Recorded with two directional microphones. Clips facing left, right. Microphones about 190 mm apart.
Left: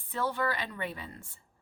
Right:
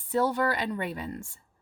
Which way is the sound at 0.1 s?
40° right (ahead or behind).